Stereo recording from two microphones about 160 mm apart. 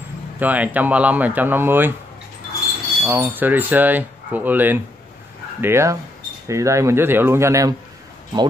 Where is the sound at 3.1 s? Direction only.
10° right (ahead or behind).